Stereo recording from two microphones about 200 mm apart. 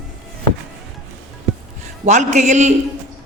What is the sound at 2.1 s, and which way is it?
Speech, 35° right (ahead or behind).